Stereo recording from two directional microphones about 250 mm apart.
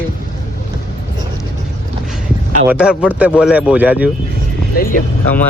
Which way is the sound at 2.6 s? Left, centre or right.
Centre.